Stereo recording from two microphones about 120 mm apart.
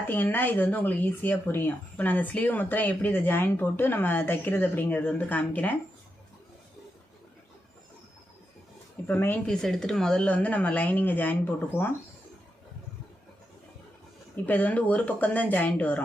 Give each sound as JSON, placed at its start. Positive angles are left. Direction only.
{"t": 0.1, "sound": "speech", "side_deg": 15}
{"t": 9.0, "sound": "speech", "side_deg": 15}
{"t": 9.5, "sound": "speech", "side_deg": 5}
{"t": 14.3, "sound": "speech", "side_deg": 15}